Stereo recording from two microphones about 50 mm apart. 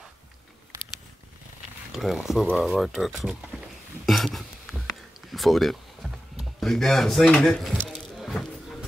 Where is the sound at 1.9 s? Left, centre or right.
Centre.